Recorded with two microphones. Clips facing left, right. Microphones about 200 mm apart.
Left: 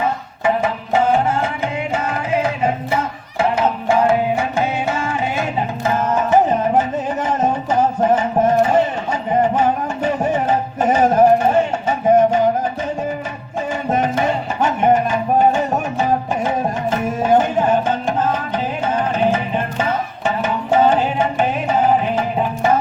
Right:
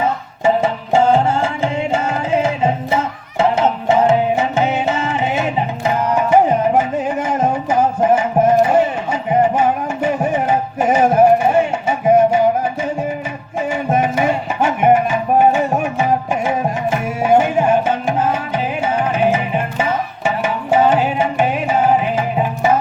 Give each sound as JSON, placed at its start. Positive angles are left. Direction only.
{"t": 0.4, "sound": "music", "side_deg": -25}
{"t": 3.8, "sound": "music", "side_deg": -25}
{"t": 13.9, "sound": "music", "side_deg": -10}